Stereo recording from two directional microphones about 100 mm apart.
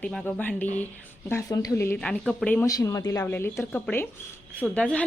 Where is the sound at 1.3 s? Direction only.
30° left (ahead or behind).